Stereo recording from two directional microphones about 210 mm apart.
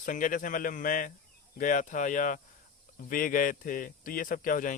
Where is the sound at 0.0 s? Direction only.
40° left (ahead or behind).